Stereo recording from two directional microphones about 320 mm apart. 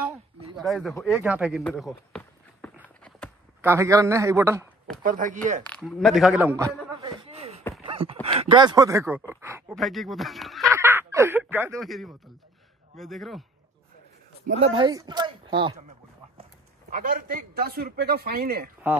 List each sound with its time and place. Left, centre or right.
0.6 s a sound: centre
3.6 s a man's voice: centre
5.0 s speech: right
5.7 s a man's voice: centre
7.0 s a sound: centre
7.8 s speech: centre
9.3 s a sound: centre
12.9 s a man's voice: centre
14.6 s speech: centre
16.9 s speech: right